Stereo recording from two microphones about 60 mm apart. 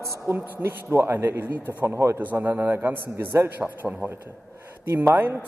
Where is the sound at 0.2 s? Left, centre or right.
Right.